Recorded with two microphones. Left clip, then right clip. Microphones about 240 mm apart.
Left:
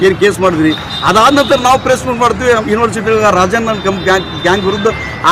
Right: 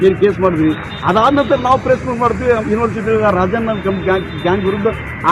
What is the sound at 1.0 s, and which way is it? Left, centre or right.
A man's voice, left.